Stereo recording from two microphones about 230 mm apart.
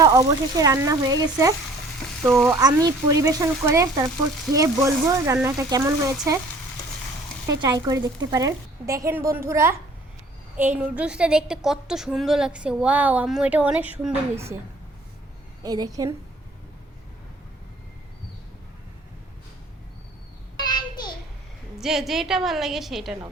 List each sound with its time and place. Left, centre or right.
0.0 s a woman's voice: centre
2.2 s a woman's voice: centre
2.5 s a woman's voice: centre
7.4 s a woman's voice: centre
15.6 s a woman's voice: centre
20.6 s child singing: centre
21.8 s a woman's voice: centre